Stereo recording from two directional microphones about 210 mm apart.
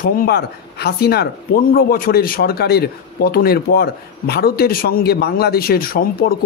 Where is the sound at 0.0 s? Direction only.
45° left (ahead or behind).